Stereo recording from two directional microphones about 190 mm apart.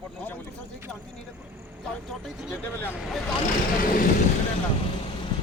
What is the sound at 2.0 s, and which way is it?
Speech, centre (ahead or behind).